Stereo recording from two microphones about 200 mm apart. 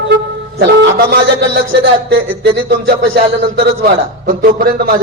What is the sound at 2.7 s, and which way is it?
A man's voice, 55° right (ahead or behind).